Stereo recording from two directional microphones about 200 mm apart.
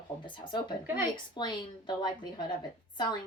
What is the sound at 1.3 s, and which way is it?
A woman's voice, 25° left (ahead or behind).